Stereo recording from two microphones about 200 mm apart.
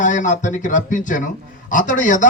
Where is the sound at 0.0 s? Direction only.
40° left (ahead or behind).